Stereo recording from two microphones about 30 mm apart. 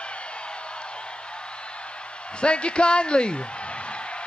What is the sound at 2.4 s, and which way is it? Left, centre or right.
Speech, left.